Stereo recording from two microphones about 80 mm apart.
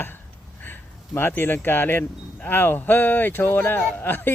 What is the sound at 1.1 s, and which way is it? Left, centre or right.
Speech, left.